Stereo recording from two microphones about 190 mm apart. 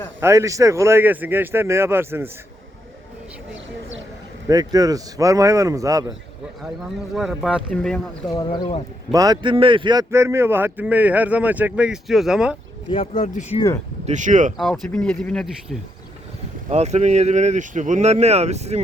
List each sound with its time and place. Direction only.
0.2 s a man's voice: 15° right (ahead or behind)
4.4 s a man's voice: 20° right (ahead or behind)
7.1 s speech: centre (ahead or behind)
8.3 s speech: 20° left (ahead or behind)
9.1 s a man's voice: 20° right (ahead or behind); by 12.5 s 5° right (ahead or behind)
13.1 s speech: 40° left (ahead or behind)
14.0 s speech: 40° right (ahead or behind)
14.6 s speech: centre (ahead or behind)
16.6 s speech: 35° right (ahead or behind)